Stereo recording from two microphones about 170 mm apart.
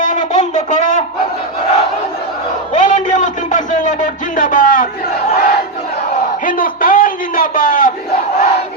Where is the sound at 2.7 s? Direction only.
45° left (ahead or behind).